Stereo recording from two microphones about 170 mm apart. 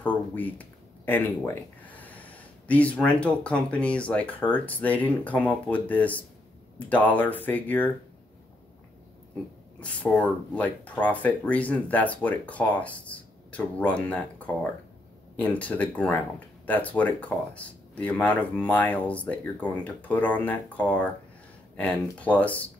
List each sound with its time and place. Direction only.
0.0 s speech: 10° left (ahead or behind)
9.8 s speech: 5° left (ahead or behind)